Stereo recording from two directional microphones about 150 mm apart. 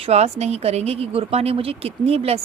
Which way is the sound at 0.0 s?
45° right (ahead or behind).